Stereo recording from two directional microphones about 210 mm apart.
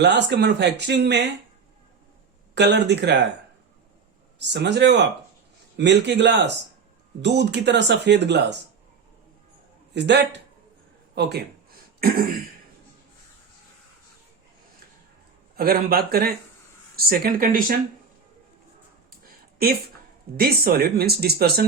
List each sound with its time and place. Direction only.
0.0 s speech: 55° right (ahead or behind)
2.6 s speech: 55° right (ahead or behind)
4.4 s speech: 55° right (ahead or behind)
9.9 s speech: 55° right (ahead or behind)
11.1 s a sound: 50° right (ahead or behind)
15.5 s speech: 45° right (ahead or behind)
20.3 s speech: 45° right (ahead or behind)